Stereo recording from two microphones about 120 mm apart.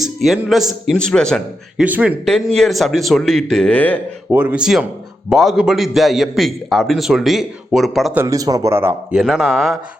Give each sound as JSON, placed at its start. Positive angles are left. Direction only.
{"t": 0.3, "sound": "a man's voice", "side_deg": -5}
{"t": 1.8, "sound": "speech", "side_deg": -10}
{"t": 2.2, "sound": "a man's voice", "side_deg": 5}
{"t": 4.3, "sound": "a man's voice", "side_deg": -15}
{"t": 8.1, "sound": "speech", "side_deg": -25}
{"t": 9.1, "sound": "a man's voice", "side_deg": 0}